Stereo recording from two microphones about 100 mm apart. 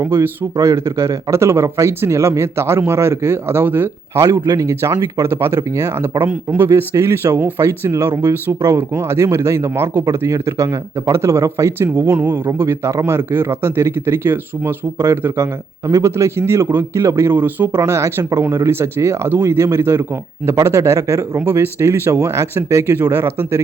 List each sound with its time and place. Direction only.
0.0 s speech: 25° right (ahead or behind)
4.2 s speech: 35° right (ahead or behind); by 6.7 s 20° right (ahead or behind)
6.7 s speech: 30° right (ahead or behind)